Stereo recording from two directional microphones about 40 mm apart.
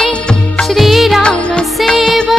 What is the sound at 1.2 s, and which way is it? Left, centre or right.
Music, left.